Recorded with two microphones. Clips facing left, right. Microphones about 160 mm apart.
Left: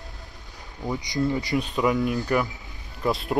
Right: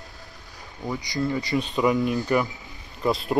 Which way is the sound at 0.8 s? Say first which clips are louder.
Left 1 dB; 15° left (ahead or behind).